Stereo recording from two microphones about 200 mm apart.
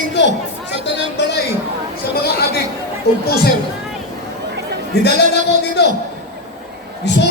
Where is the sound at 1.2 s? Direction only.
60° left (ahead or behind).